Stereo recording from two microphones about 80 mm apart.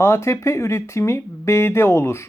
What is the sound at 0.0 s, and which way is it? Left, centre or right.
Speech, left.